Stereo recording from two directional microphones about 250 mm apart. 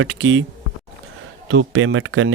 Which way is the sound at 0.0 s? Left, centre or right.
Right.